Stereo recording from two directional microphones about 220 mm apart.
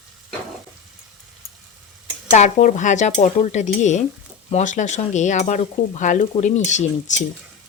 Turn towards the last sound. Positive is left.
turn(degrees=35)  # may be behind; listen again after turning